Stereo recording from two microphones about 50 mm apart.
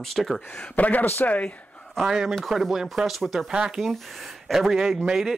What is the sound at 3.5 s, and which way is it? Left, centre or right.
Speech, centre.